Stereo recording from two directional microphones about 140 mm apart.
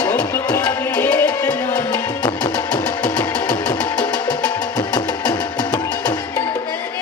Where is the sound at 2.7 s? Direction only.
10° left (ahead or behind).